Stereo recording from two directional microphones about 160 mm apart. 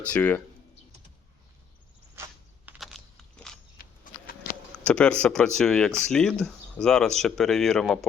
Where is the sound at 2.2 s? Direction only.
15° right (ahead or behind).